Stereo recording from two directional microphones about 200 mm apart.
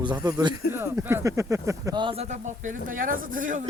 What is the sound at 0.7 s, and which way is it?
Speech, 10° right (ahead or behind).